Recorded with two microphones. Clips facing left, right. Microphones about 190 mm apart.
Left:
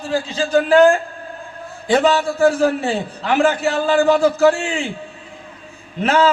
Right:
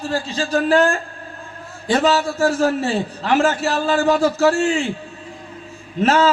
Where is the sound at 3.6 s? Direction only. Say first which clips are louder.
Left 3 dB; 35° right (ahead or behind).